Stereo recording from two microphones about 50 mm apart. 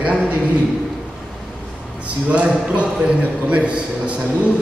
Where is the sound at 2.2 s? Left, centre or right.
Right.